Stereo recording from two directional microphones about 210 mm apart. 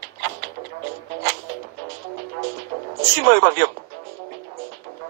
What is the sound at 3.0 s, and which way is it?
Speech, 45° right (ahead or behind).